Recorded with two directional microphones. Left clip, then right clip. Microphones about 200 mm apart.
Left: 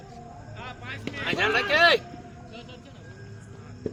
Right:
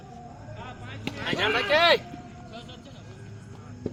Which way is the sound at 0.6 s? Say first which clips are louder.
Left 5 dB; 30° left (ahead or behind).